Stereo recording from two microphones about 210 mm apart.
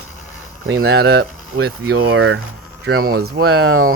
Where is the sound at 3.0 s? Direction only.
45° right (ahead or behind).